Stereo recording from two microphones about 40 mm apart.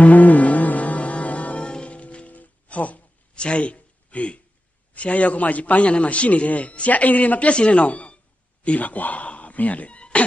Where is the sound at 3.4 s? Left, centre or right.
Left.